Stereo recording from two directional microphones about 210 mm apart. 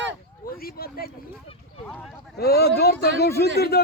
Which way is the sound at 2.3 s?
50° left (ahead or behind).